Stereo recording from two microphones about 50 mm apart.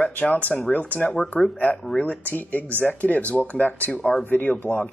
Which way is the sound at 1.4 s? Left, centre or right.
Centre.